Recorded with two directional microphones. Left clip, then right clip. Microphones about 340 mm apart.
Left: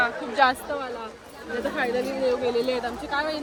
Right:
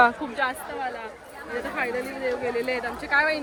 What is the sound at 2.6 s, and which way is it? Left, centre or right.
Speech, centre.